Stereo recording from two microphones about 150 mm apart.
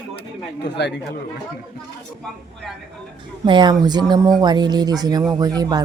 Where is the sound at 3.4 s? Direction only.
30° right (ahead or behind).